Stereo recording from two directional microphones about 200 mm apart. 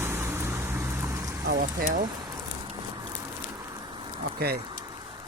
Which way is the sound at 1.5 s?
45° right (ahead or behind).